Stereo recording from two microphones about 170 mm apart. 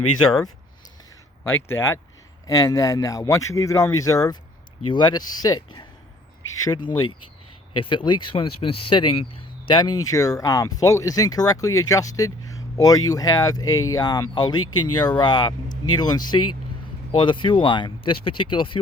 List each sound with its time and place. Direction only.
1.5 s speech: 15° left (ahead or behind); by 18.8 s 30° left (ahead or behind)